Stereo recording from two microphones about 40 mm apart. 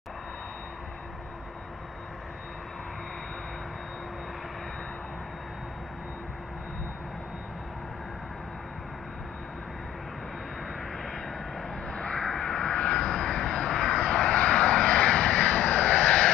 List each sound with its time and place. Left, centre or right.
11.9 s vehicle: left